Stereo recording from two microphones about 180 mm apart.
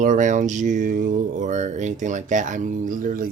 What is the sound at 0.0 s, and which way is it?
Speech, 45° right (ahead or behind).